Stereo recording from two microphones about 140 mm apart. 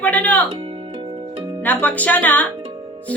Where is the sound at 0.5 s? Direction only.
35° right (ahead or behind).